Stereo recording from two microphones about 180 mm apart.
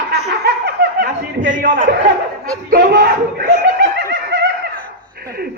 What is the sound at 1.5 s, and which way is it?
Speech, 50° right (ahead or behind).